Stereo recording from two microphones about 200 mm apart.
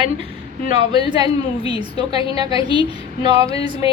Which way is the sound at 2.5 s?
25° left (ahead or behind).